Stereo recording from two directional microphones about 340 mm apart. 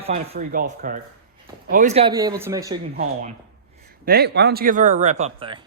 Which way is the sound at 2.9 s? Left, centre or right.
Right.